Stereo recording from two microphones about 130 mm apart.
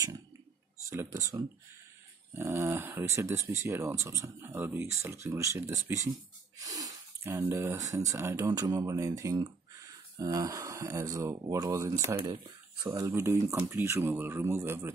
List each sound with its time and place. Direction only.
0.8 s speech: 25° right (ahead or behind)
6.6 s a sound: 25° right (ahead or behind)
7.4 s speech: 20° right (ahead or behind)